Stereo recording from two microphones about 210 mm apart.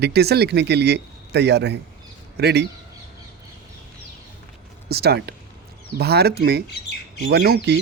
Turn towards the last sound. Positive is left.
turn(degrees=-50)  # may be behind; listen again after turning